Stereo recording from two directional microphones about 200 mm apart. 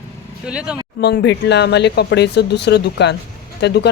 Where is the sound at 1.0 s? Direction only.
60° left (ahead or behind).